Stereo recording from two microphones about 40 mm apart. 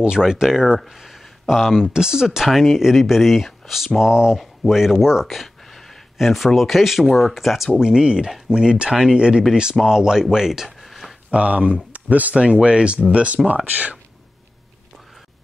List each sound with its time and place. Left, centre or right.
0.0 s speech: centre
4.0 s speech: centre
4.4 s speech: centre
5.2 s a sound: centre
6.1 s speech: centre
7.8 s speech: centre
10.8 s a sound: centre
11.2 s speech: right
11.9 s a sound: right
12.4 s speech: right